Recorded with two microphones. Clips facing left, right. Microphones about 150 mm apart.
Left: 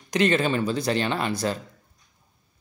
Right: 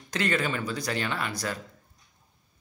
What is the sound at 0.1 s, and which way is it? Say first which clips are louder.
Speech: left 6 dB; 20° left (ahead or behind).